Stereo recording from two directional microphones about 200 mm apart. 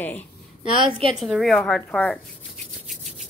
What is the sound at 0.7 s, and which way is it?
Speech, 25° right (ahead or behind).